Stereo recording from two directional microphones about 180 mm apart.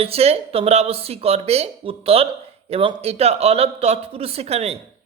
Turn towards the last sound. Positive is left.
turn(degrees=-35)  # may be behind; listen again after turning